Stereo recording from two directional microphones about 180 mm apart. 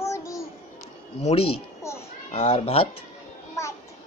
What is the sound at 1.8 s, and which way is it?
Children playing, 15° left (ahead or behind).